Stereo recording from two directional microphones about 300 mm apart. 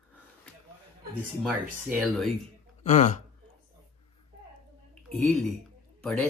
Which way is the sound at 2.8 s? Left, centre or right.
Left.